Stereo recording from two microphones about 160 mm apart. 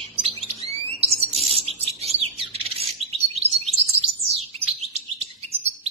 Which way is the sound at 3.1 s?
40° right (ahead or behind).